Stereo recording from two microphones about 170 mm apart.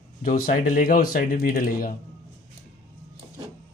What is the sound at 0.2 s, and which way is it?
Speech, 55° left (ahead or behind).